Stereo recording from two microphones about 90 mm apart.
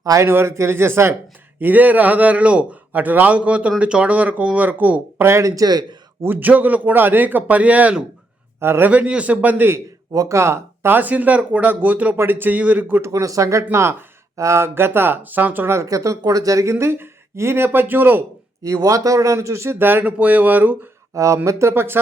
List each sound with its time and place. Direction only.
0.0 s a man's voice: 40° right (ahead or behind)
0.3 s a man's voice: 30° right (ahead or behind); by 5.8 s 45° right (ahead or behind)
6.2 s a man's voice: 20° right (ahead or behind)
8.6 s speech: 25° right (ahead or behind)
8.9 s a man's voice: 15° right (ahead or behind)
10.1 s speech: 40° right (ahead or behind); by 13.0 s 15° right (ahead or behind)
13.0 s speech: 35° right (ahead or behind)
18.6 s speech: 40° right (ahead or behind); by 20.7 s 20° right (ahead or behind)
21.3 s speech: 30° right (ahead or behind)